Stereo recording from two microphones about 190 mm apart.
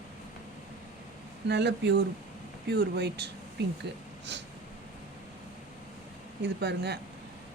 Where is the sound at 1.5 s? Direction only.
65° right (ahead or behind).